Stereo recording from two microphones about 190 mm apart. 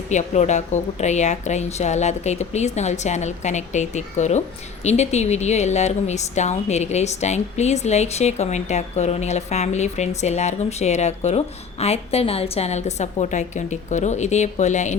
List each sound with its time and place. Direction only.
0.1 s a woman's voice: 40° left (ahead or behind)